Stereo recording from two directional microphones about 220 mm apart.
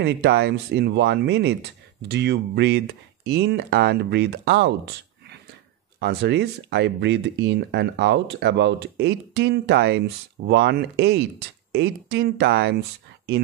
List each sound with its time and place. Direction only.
0.0 s speech: 50° right (ahead or behind)
5.9 s speech: 50° right (ahead or behind)